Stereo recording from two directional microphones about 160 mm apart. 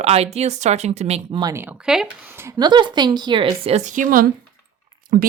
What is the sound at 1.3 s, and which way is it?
Speech, 25° right (ahead or behind).